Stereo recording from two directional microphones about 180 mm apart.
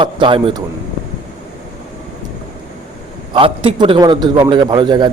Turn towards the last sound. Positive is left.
turn(degrees=-25)  # may be behind; listen again after turning